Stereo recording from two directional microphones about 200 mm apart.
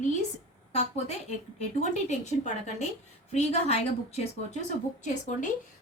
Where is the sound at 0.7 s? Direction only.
30° left (ahead or behind).